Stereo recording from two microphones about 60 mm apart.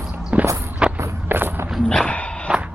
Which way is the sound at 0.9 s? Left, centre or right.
Right.